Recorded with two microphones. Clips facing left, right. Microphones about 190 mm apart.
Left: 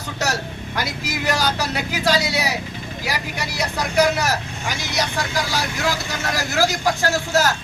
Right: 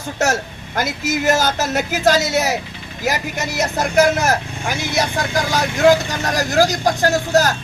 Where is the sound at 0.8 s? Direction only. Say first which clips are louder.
Right 6 dB; 45° right (ahead or behind).